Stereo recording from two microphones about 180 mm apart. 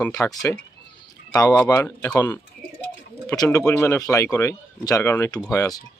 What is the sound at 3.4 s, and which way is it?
A man's voice, 15° left (ahead or behind).